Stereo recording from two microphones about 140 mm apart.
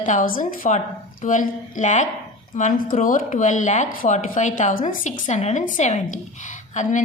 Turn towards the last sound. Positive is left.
turn(degrees=60)  # may be behind; listen again after turning